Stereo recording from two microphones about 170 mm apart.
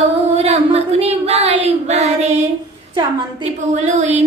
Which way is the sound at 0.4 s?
35° right (ahead or behind).